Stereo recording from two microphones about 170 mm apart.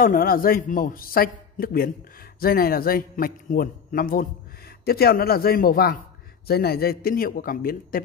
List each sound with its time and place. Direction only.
0.0 s a man's voice: 55° left (ahead or behind)